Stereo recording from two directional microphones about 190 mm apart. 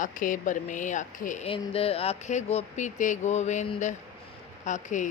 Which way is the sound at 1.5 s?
30° left (ahead or behind).